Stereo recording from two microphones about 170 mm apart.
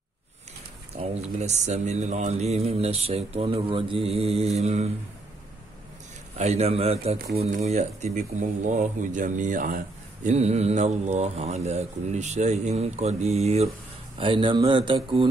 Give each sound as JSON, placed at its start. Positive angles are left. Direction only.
{"t": 0.9, "sound": "a man's voice", "side_deg": -40}
{"t": 6.3, "sound": "a man's voice", "side_deg": -40}